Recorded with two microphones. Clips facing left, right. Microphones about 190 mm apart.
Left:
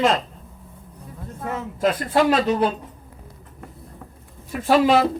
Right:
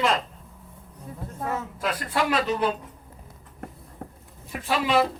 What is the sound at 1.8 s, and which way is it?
Speech, 40° left (ahead or behind).